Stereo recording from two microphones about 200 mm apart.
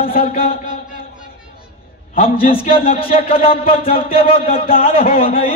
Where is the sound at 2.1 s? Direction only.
45° left (ahead or behind).